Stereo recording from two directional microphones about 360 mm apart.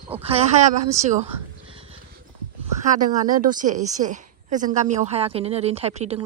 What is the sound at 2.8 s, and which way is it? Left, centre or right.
A woman's voice, right.